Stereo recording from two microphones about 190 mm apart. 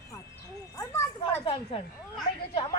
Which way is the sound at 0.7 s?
15° left (ahead or behind).